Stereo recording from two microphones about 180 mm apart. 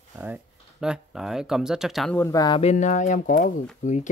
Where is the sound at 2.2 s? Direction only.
20° left (ahead or behind).